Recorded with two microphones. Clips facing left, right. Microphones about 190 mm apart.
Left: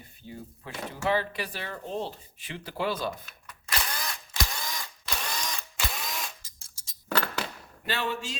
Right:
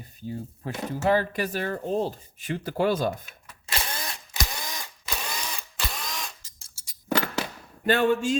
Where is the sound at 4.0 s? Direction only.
25° right (ahead or behind).